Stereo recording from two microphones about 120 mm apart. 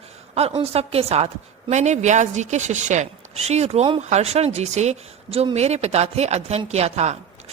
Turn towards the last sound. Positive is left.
turn(degrees=-65)  # may be behind; listen again after turning